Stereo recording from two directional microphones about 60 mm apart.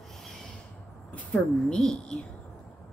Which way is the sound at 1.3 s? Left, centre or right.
Centre.